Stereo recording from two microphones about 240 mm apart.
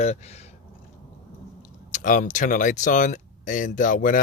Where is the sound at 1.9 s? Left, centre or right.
Left.